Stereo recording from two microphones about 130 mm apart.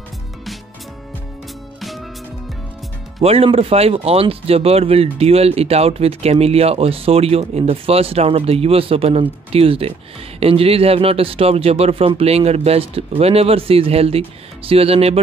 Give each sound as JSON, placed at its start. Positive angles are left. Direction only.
{"t": 1.8, "sound": "music", "side_deg": 0}
{"t": 3.2, "sound": "speech", "side_deg": -50}